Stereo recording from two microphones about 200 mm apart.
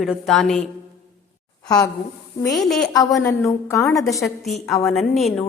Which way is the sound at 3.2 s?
15° left (ahead or behind).